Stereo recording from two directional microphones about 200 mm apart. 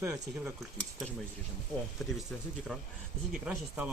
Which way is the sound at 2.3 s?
5° left (ahead or behind).